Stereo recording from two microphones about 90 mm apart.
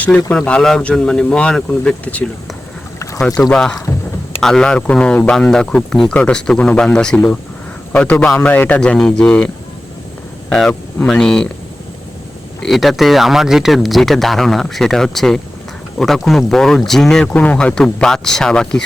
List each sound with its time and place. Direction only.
0.3 s a man's voice: 10° left (ahead or behind)
8.8 s speech: 10° left (ahead or behind)
10.5 s speech: 5° left (ahead or behind)
12.6 s speech: centre (ahead or behind)
17.3 s speech: 15° left (ahead or behind)